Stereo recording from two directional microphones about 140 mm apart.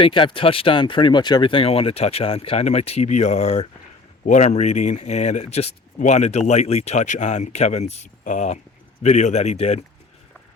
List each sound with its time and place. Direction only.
0.0 s speech: 35° left (ahead or behind)